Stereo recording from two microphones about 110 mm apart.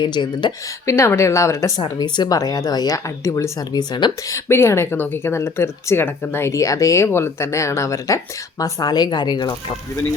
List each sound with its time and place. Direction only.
0.0 s speech: 45° left (ahead or behind)
0.9 s speech: 25° left (ahead or behind)
2.0 s speech: 40° left (ahead or behind)
4.3 s speech: 25° left (ahead or behind); by 9.7 s 40° left (ahead or behind)